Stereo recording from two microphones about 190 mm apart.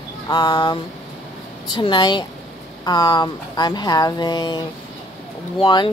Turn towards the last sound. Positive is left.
turn(degrees=25)  # may be behind; listen again after turning